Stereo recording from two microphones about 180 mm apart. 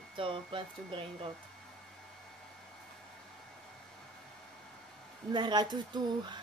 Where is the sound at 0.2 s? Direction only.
30° right (ahead or behind).